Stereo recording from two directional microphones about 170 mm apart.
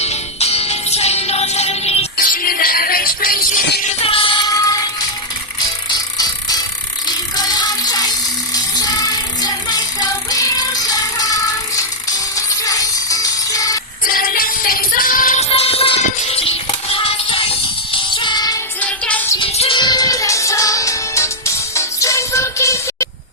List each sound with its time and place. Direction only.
0.0 s music: 40° left (ahead or behind)
2.1 s music: 55° left (ahead or behind)
4.0 s music: 30° left (ahead or behind)
5.9 s music: 25° left (ahead or behind)
14.0 s music: 55° left (ahead or behind)
15.4 s music: 35° left (ahead or behind)
18.8 s music: 10° left (ahead or behind)
19.4 s music: 30° left (ahead or behind); by 23.0 s 15° left (ahead or behind)